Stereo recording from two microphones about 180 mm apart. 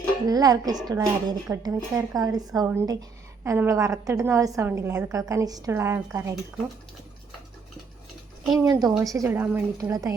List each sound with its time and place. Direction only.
0.3 s a woman's voice: 20° right (ahead or behind)
8.5 s a woman's voice: 20° right (ahead or behind)